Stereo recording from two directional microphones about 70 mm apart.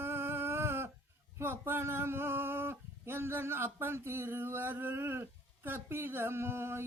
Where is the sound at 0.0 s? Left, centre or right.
Right.